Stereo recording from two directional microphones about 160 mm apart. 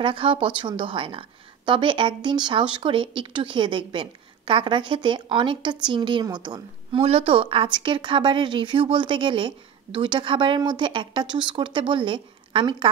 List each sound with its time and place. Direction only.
0.0 s speech: 30° right (ahead or behind)